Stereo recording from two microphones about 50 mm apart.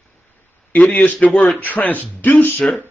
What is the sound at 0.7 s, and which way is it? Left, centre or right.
A man's voice, left.